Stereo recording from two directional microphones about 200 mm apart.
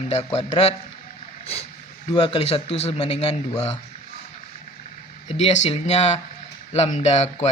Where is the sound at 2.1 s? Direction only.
25° left (ahead or behind).